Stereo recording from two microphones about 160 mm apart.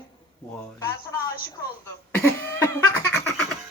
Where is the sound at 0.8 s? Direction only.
15° left (ahead or behind).